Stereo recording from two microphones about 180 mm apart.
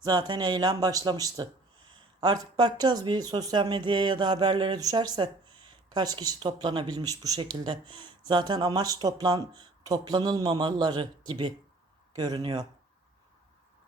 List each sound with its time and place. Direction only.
0.0 s speech: 25° right (ahead or behind)